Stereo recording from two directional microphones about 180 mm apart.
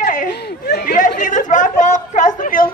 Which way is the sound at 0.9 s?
45° left (ahead or behind).